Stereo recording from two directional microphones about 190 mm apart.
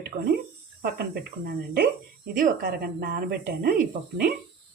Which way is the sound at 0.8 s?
55° right (ahead or behind).